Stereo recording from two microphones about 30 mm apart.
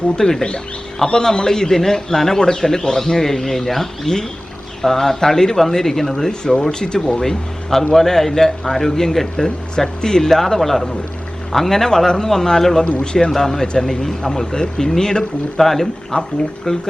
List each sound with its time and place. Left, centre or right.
0.2 s a man's voice: centre
9.4 s a man's voice: left
15.6 s speech: centre
16.1 s speech: left
16.7 s a man's voice: left